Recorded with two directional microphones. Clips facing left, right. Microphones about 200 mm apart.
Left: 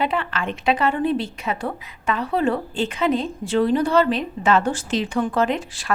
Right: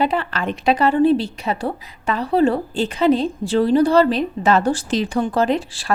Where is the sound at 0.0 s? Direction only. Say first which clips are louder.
Right 3 dB; 35° right (ahead or behind).